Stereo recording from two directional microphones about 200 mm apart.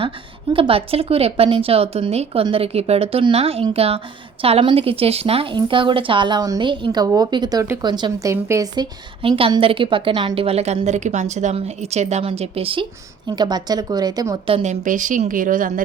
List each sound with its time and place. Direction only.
0.5 s a woman's voice: 25° right (ahead or behind)